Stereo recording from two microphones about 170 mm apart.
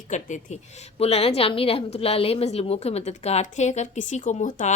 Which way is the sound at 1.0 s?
35° left (ahead or behind).